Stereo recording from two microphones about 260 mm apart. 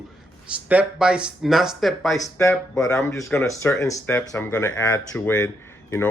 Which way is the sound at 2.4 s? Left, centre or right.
Centre.